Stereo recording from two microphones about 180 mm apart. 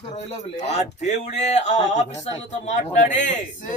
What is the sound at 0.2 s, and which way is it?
Speech, 40° left (ahead or behind).